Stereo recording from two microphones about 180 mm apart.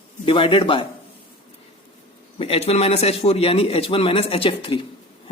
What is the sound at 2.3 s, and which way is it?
Speech, 35° left (ahead or behind).